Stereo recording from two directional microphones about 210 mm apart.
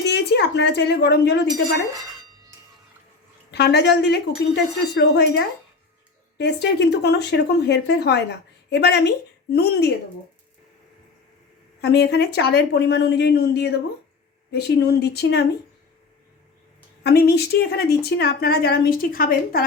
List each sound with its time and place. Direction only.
0.1 s a woman's voice: 55° left (ahead or behind)
3.5 s speech: 55° left (ahead or behind)
11.8 s speech: 50° left (ahead or behind)
17.0 s speech: 50° left (ahead or behind)